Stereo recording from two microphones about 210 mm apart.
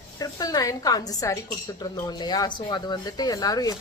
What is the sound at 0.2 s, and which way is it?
A woman's voice, 20° left (ahead or behind).